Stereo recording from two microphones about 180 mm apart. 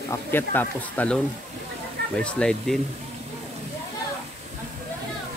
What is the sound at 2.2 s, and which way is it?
Speech, 5° left (ahead or behind).